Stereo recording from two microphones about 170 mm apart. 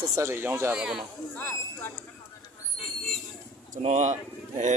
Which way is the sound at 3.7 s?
45° right (ahead or behind).